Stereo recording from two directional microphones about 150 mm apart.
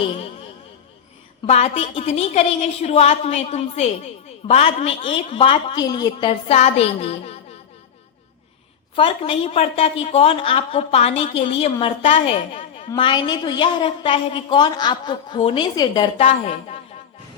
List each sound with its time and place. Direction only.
1.5 s a woman's voice: 45° left (ahead or behind)
9.0 s a woman's voice: 40° left (ahead or behind)
13.0 s a woman's voice: 30° left (ahead or behind)
16.1 s a woman's voice: 40° left (ahead or behind)